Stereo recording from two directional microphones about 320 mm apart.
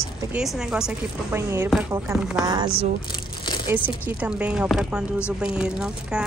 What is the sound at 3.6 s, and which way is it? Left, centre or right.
Speech, centre.